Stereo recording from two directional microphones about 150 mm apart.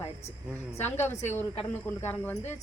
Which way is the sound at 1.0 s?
15° left (ahead or behind).